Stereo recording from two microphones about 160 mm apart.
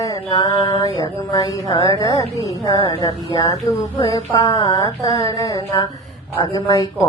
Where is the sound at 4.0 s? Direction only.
20° left (ahead or behind).